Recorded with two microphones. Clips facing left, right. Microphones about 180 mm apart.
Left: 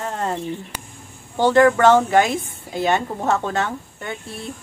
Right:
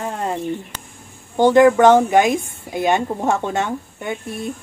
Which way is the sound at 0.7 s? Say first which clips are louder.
Left 1 dB; 10° left (ahead or behind).